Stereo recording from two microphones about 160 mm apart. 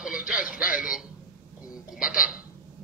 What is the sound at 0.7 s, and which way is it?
Speech, 5° right (ahead or behind).